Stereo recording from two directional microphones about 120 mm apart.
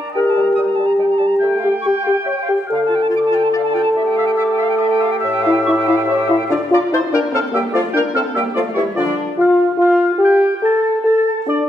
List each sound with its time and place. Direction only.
4.9 s music: 50° right (ahead or behind)
6.3 s music: 25° left (ahead or behind)
9.4 s french horn: 15° right (ahead or behind)